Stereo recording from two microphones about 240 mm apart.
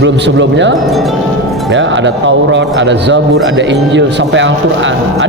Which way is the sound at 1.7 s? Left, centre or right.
Right.